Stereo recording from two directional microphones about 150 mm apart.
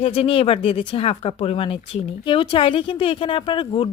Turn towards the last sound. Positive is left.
turn(degrees=35)  # may be behind; listen again after turning